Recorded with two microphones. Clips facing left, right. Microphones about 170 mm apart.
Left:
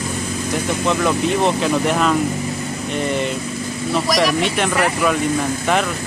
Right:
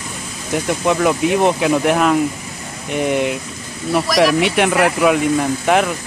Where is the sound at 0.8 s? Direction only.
15° right (ahead or behind).